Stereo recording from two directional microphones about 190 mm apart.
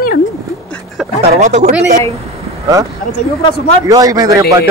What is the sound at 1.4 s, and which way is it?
Speech, 35° right (ahead or behind).